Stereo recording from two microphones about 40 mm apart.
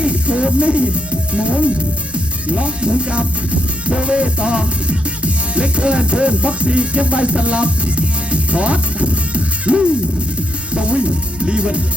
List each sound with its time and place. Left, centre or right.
0.0 s music: right
10.8 s music: right